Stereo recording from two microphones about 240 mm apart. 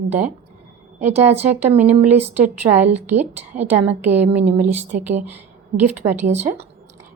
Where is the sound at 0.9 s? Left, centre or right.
Right.